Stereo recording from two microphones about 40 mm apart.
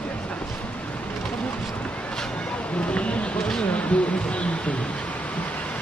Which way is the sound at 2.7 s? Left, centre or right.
Left.